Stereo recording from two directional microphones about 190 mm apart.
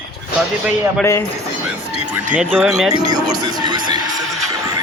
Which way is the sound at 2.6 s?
Centre (ahead or behind).